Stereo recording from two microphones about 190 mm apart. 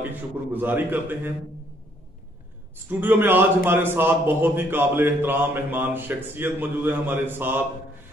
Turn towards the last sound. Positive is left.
turn(degrees=-10)  # may be behind; listen again after turning